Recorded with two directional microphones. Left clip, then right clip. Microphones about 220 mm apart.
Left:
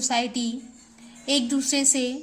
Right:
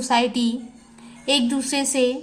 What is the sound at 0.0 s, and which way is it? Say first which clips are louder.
A child's voice: right 5 dB; 15° left (ahead or behind).